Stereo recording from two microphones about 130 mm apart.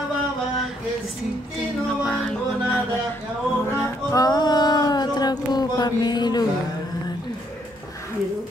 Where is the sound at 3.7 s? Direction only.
20° left (ahead or behind).